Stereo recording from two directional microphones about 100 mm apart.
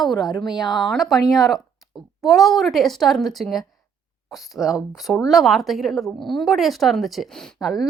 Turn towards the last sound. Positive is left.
turn(degrees=-5)  # may be behind; listen again after turning